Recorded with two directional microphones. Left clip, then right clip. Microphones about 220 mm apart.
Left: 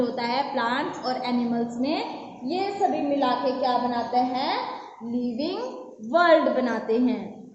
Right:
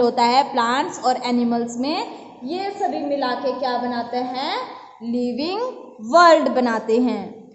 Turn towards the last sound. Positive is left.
turn(degrees=-45)  # may be behind; listen again after turning